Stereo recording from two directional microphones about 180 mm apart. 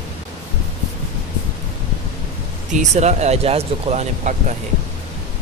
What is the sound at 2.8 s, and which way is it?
Speech, 40° right (ahead or behind).